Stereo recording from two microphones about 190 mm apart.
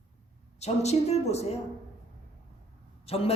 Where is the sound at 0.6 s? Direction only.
35° left (ahead or behind).